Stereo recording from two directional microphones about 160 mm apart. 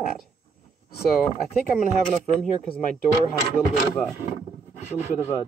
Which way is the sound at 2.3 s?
5° left (ahead or behind).